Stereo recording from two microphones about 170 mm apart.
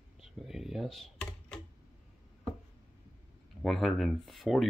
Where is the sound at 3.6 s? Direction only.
Centre (ahead or behind).